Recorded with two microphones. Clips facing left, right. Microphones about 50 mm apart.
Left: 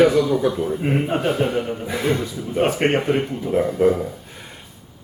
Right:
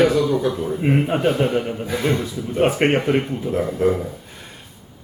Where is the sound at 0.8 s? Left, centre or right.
Centre.